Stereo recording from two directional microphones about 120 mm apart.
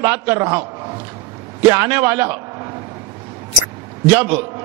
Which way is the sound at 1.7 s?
20° right (ahead or behind).